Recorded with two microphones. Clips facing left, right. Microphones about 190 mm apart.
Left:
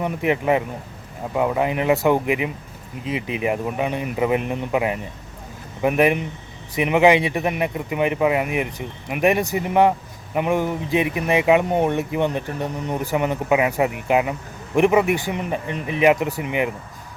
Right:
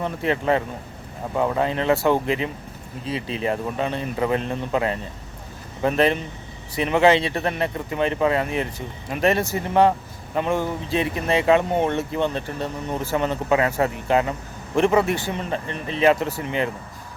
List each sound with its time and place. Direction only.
0.0 s speech: 15° left (ahead or behind)